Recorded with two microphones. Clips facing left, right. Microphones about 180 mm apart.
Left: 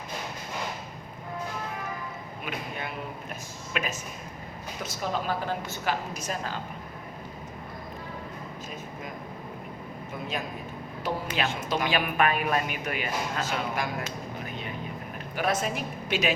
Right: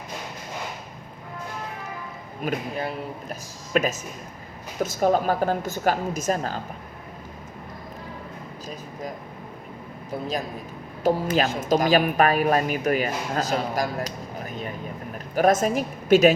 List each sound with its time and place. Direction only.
2.4 s a woman's voice: 40° right (ahead or behind)
10.1 s a woman's voice: 35° right (ahead or behind)